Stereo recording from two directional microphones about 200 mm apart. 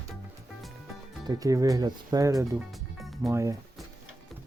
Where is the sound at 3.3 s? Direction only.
15° right (ahead or behind).